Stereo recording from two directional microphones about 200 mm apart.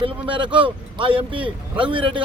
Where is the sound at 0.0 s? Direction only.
25° right (ahead or behind).